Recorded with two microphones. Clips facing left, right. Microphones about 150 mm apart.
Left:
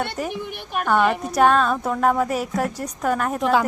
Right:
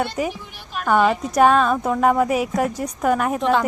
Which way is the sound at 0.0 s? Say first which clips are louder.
Right 3 dB; 5° right (ahead or behind).